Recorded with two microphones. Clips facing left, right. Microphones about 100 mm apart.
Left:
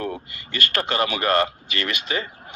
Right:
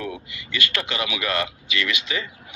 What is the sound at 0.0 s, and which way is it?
Speech, 45° left (ahead or behind).